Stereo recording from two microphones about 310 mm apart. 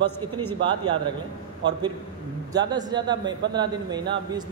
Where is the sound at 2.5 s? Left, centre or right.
Centre.